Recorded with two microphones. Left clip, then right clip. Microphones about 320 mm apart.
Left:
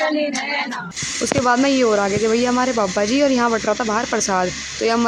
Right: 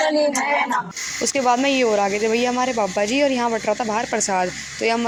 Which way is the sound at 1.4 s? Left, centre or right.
Left.